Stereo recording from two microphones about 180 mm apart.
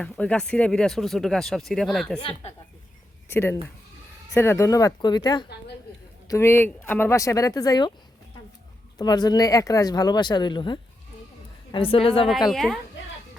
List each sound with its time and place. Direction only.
0.0 s speech: 5° left (ahead or behind)
3.2 s speech: 15° left (ahead or behind)
9.0 s a woman's voice: 20° left (ahead or behind)
12.5 s speech: centre (ahead or behind)